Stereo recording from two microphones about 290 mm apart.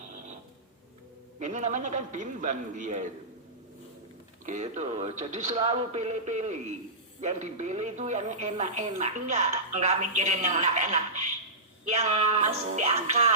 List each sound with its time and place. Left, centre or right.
1.4 s a woman's voice: right
4.4 s a woman's voice: right